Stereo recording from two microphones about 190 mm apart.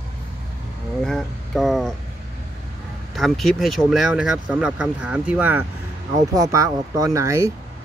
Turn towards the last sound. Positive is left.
turn(degrees=-15)  # may be behind; listen again after turning